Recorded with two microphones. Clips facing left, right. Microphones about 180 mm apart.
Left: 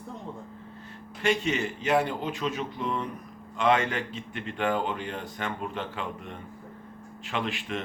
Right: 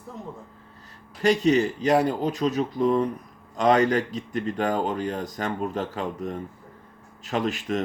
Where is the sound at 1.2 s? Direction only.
40° right (ahead or behind).